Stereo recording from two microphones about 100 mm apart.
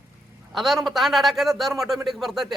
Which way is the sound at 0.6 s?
Centre (ahead or behind).